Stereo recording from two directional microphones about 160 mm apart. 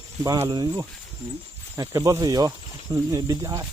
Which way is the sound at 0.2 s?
20° right (ahead or behind).